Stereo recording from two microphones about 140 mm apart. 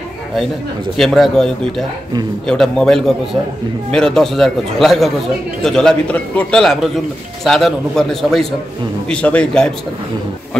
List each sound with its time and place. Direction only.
0.9 s a man's voice: centre (ahead or behind)